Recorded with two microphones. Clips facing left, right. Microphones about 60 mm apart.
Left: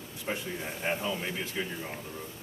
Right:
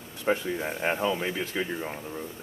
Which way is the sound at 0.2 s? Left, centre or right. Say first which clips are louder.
Right 8 dB; right.